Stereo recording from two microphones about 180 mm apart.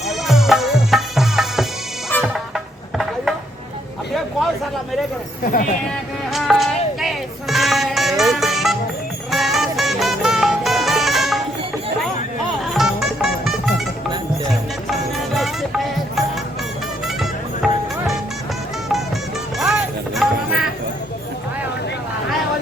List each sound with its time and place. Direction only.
0.1 s music: centre (ahead or behind)
5.4 s speech: 50° left (ahead or behind)
6.3 s music: centre (ahead or behind)
12.7 s music: centre (ahead or behind)
15.4 s music: centre (ahead or behind)
19.5 s music: centre (ahead or behind)